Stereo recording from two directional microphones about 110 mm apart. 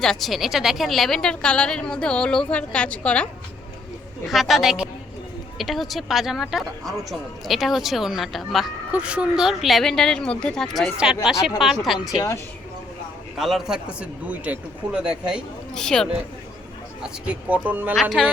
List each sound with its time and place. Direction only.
0.0 s a woman's voice: 5° left (ahead or behind)
4.3 s speech: centre (ahead or behind)
10.9 s speech: 5° right (ahead or behind)
11.9 s speech: 40° left (ahead or behind)
13.4 s speech: 5° right (ahead or behind)
15.7 s speech: 5° left (ahead or behind)
17.2 s speech: 15° right (ahead or behind)
18.2 s speech: centre (ahead or behind)